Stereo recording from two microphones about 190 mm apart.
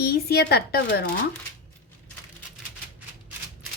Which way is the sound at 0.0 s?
55° left (ahead or behind).